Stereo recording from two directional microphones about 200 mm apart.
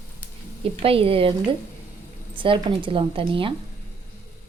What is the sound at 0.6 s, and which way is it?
A woman's voice, 25° right (ahead or behind).